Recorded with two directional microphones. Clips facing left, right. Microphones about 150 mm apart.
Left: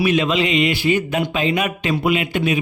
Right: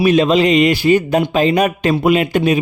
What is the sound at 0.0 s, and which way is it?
Speech, 35° right (ahead or behind).